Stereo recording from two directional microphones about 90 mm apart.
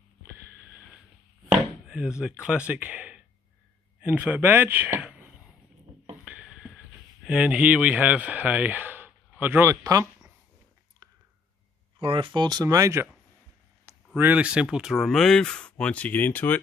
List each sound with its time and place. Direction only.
1.5 s chop: 10° right (ahead or behind)
2.4 s speech: 10° right (ahead or behind)
6.2 s a sound: 10° right (ahead or behind)
7.2 s speech: 10° right (ahead or behind); by 10.0 s 35° right (ahead or behind)
12.0 s speech: 75° right (ahead or behind); by 12.6 s 55° right (ahead or behind)
12.6 s speech: 35° right (ahead or behind)
14.1 s speech: 20° right (ahead or behind); by 16.5 s 20° left (ahead or behind)